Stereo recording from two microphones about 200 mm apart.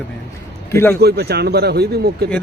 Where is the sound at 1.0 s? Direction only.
55° right (ahead or behind).